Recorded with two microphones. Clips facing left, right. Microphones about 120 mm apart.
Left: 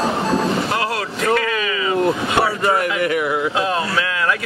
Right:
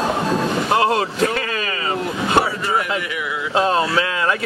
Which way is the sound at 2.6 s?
50° left (ahead or behind).